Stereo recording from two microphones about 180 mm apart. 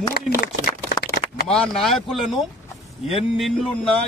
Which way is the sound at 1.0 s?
60° left (ahead or behind).